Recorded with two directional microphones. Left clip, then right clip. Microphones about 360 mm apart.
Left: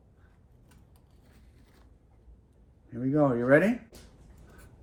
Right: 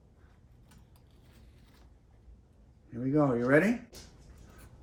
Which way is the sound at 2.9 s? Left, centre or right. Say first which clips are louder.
Left 2 dB; centre.